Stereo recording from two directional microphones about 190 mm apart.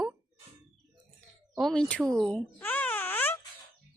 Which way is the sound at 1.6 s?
5° left (ahead or behind).